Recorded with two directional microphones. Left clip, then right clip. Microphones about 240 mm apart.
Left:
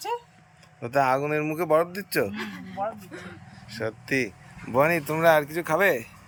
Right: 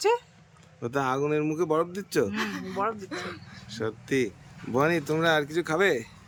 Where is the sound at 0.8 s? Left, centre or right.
Centre.